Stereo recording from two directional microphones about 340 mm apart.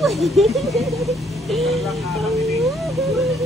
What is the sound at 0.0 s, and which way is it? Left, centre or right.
Vehicle, centre.